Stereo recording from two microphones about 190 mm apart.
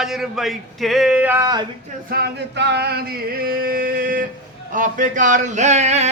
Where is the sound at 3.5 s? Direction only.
50° right (ahead or behind).